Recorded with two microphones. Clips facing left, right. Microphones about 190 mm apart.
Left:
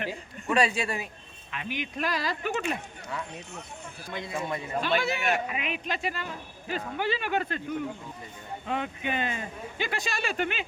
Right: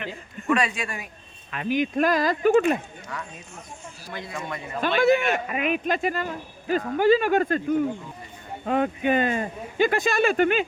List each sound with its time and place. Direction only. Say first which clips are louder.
0.5 s speech: even; 30° left (ahead or behind)
1.5 s speech: right 10 dB; 45° right (ahead or behind)
4.1 s a man's voice: left 1 dB; 20° left (ahead or behind)
4.8 s speech: right 9 dB; 50° right (ahead or behind)
8.6 s speech: right 9 dB; 45° right (ahead or behind)